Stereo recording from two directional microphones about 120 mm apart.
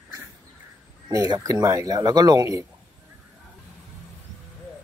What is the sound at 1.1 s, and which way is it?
Speech, 30° right (ahead or behind).